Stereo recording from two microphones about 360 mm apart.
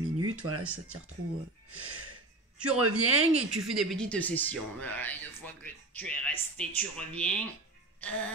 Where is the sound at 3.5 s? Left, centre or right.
Centre.